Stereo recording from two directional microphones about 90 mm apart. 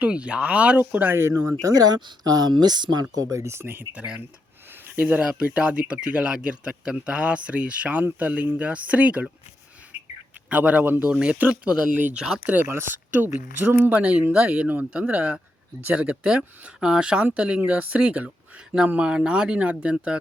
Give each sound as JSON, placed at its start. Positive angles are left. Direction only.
{"t": 0.0, "sound": "speech", "side_deg": -10}
{"t": 10.5, "sound": "speech", "side_deg": -15}
{"t": 12.5, "sound": "speech", "side_deg": -25}